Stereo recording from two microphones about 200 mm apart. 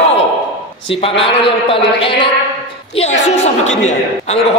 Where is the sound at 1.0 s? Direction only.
30° left (ahead or behind).